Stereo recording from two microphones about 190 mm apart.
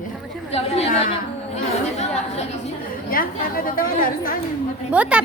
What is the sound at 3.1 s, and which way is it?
A woman's voice, 50° left (ahead or behind).